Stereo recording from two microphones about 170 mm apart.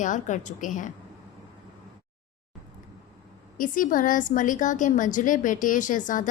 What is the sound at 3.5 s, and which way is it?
A woman's voice, 50° left (ahead or behind).